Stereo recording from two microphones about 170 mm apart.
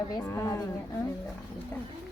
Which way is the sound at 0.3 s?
15° left (ahead or behind).